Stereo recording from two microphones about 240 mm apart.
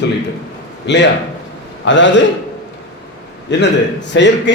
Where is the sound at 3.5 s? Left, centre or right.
Left.